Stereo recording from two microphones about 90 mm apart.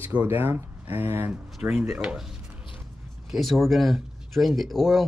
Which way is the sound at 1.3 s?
15° right (ahead or behind).